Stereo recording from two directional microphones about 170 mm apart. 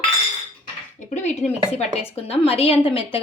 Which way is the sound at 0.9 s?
45° left (ahead or behind).